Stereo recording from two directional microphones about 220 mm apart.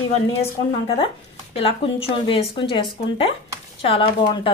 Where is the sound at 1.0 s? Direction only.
25° left (ahead or behind).